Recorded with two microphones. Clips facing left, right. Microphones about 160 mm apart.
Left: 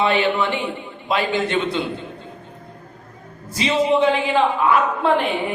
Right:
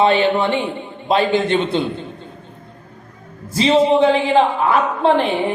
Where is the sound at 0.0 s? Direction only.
35° right (ahead or behind).